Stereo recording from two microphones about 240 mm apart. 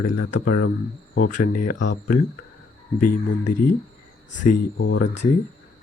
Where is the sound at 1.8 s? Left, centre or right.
Left.